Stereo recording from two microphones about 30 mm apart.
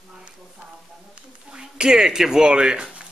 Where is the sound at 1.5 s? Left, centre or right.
Right.